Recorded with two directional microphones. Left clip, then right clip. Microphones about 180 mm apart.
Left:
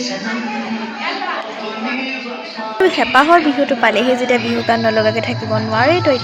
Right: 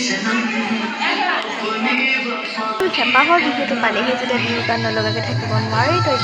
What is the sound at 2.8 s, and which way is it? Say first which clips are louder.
A woman's voice: left 4 dB; 25° left (ahead or behind).